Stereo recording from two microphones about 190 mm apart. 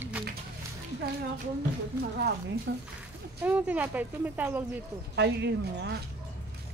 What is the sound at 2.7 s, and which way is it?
Speech, 65° right (ahead or behind).